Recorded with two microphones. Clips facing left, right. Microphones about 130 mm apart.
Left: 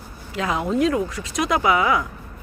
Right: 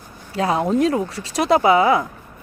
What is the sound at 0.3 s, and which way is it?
Speech, 35° right (ahead or behind).